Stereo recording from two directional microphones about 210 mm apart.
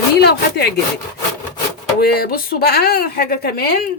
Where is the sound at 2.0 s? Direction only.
45° left (ahead or behind).